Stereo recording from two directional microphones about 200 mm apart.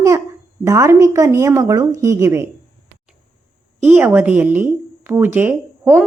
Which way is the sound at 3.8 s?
10° right (ahead or behind).